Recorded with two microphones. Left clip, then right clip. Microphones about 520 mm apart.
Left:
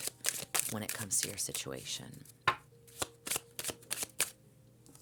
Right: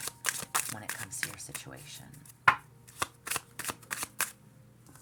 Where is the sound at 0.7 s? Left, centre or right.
Left.